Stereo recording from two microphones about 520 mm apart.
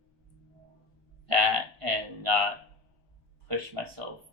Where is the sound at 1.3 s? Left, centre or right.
Right.